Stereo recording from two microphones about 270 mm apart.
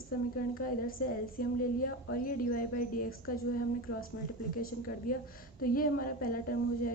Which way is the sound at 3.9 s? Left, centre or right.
Left.